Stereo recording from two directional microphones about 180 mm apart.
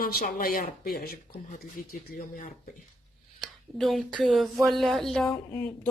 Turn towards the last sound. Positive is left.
turn(degrees=10)  # may be behind; listen again after turning